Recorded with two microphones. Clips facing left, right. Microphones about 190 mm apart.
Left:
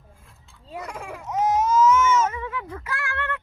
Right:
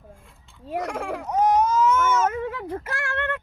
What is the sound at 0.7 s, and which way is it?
Speech, 90° right.